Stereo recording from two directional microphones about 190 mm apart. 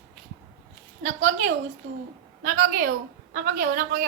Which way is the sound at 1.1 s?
90° right.